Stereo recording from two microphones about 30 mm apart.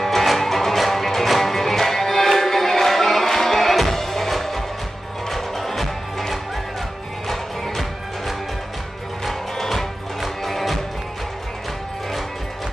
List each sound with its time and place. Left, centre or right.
0.0 s music: centre
9.2 s music: centre